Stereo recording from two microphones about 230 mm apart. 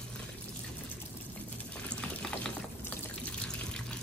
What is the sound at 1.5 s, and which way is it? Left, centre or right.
Water, centre.